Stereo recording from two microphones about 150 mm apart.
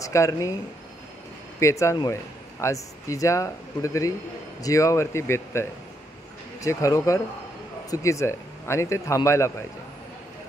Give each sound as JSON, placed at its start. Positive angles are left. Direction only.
{"t": 0.0, "sound": "speech", "side_deg": 20}
{"t": 1.6, "sound": "speech", "side_deg": 20}